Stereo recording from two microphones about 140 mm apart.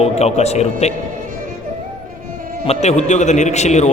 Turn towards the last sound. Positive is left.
turn(degrees=55)  # may be behind; listen again after turning